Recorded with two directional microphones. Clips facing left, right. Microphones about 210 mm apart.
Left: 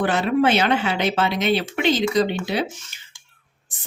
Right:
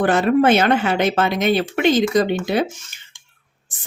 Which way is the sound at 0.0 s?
50° right (ahead or behind).